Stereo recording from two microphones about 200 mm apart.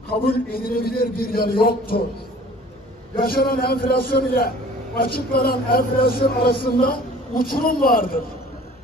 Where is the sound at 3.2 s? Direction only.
50° left (ahead or behind).